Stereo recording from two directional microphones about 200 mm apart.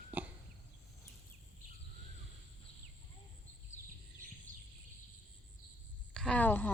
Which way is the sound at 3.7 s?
35° left (ahead or behind).